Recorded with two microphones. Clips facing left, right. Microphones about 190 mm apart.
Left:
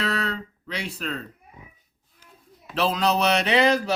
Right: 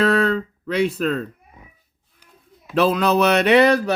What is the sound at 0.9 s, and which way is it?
Speech, 55° right (ahead or behind).